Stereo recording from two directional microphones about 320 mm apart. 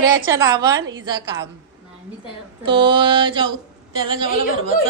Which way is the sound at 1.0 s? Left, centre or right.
Centre.